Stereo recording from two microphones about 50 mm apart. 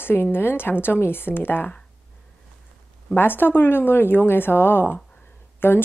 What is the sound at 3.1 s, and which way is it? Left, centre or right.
A woman's voice, left.